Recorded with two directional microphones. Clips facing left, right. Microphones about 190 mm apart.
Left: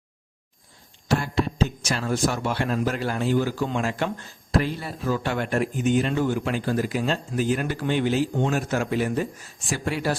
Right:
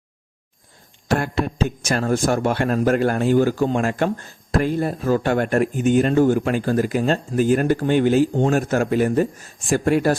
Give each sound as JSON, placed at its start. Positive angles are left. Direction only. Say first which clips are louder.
{"t": 1.0, "sound": "speech", "louder": "right 3 dB", "side_deg": -55}